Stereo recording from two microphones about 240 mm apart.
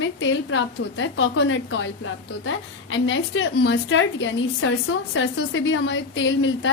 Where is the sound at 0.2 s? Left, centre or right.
Left.